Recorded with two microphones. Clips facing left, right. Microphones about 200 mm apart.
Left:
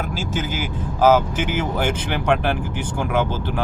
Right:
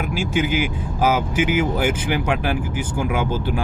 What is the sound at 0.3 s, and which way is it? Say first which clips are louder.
Speech: right 7 dB; 10° right (ahead or behind).